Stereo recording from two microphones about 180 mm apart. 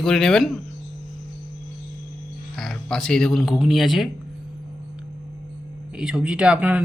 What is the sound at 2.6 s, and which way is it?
Speech, 5° left (ahead or behind).